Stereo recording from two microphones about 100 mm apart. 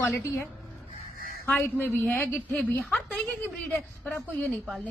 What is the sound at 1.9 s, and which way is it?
A woman's voice, 20° left (ahead or behind).